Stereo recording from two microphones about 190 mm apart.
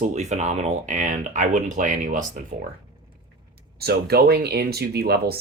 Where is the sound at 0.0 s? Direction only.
40° right (ahead or behind).